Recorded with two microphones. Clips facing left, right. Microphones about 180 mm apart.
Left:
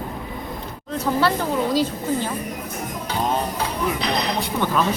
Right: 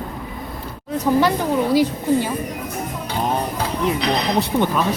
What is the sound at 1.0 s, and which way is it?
A woman's voice, 15° right (ahead or behind).